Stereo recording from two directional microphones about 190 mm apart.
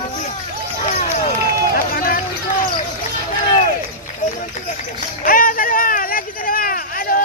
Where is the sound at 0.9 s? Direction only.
45° left (ahead or behind).